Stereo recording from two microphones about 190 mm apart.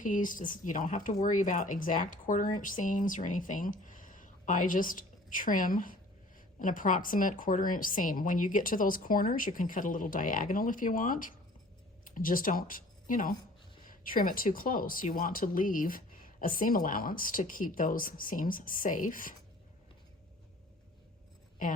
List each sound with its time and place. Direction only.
0.0 s speech: 45° left (ahead or behind)